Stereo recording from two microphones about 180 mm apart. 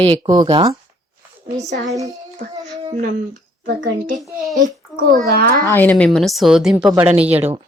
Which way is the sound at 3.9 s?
45° right (ahead or behind).